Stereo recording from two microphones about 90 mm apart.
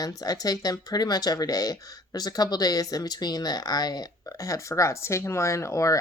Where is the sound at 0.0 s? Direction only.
45° left (ahead or behind).